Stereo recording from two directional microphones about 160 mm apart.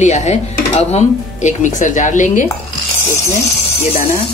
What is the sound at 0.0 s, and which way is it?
A woman's voice, 45° left (ahead or behind).